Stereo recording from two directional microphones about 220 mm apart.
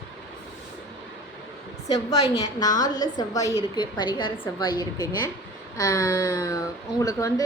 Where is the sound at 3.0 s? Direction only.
15° left (ahead or behind).